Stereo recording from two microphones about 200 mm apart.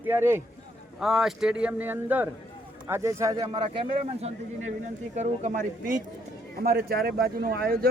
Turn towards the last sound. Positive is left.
turn(degrees=-50)  # may be behind; listen again after turning